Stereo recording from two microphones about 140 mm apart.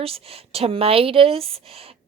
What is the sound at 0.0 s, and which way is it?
A woman's voice, 45° right (ahead or behind).